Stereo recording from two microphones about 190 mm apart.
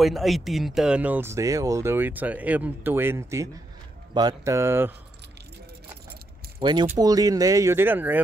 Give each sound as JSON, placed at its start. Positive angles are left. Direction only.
{"t": 0.0, "sound": "speech", "side_deg": 0}
{"t": 6.6, "sound": "speech", "side_deg": -25}